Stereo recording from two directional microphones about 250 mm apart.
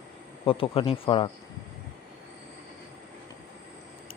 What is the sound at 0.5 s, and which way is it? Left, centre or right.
Speech, left.